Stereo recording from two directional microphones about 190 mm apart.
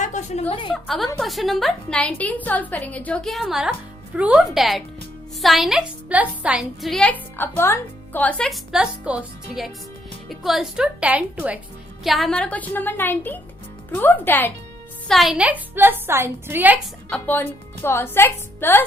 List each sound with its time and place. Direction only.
0.0 s a sound: 40° left (ahead or behind)
0.7 s a woman's voice: centre (ahead or behind)
15.0 s a woman's voice: centre (ahead or behind)
17.1 s a woman's voice: 10° left (ahead or behind)